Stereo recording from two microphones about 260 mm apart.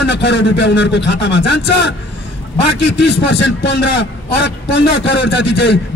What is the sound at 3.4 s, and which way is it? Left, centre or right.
A man's voice, left.